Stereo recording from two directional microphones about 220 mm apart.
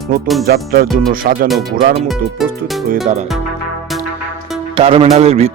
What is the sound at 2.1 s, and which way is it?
Speech, centre (ahead or behind).